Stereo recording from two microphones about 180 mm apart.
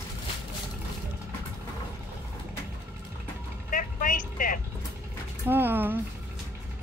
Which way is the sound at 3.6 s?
50° left (ahead or behind).